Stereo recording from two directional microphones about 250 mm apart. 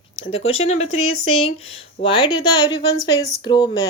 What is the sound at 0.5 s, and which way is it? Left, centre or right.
Speech, left.